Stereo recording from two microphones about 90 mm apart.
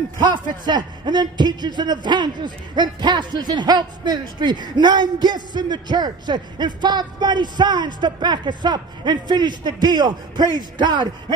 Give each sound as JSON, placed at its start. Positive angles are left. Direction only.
{"t": 0.2, "sound": "a man's voice", "side_deg": -55}